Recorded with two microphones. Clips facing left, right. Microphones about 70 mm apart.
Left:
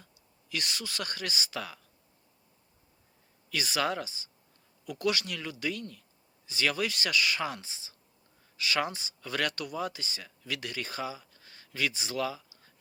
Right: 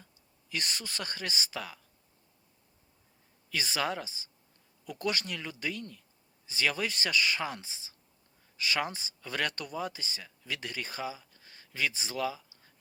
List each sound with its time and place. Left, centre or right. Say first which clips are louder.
0.5 s speech: left 1 dB; right
3.5 s speech: left 2 dB; right